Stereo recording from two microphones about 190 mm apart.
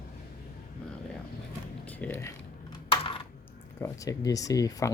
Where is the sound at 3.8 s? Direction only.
20° left (ahead or behind).